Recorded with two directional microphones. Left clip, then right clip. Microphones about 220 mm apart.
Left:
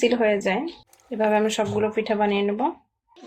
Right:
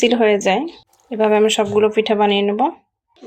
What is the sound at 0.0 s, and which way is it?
Speech, 35° right (ahead or behind).